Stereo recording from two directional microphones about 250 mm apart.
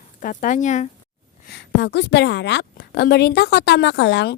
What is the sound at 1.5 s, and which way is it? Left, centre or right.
A woman's voice, left.